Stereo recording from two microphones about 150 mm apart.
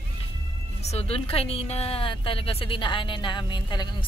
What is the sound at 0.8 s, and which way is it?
A woman's voice, 45° left (ahead or behind).